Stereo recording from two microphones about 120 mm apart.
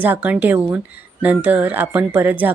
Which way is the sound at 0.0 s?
15° right (ahead or behind).